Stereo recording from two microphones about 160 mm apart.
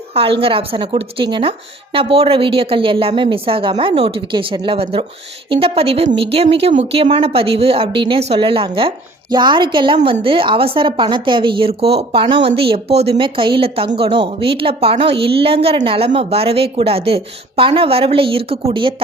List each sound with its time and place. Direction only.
0.1 s speech: 35° right (ahead or behind)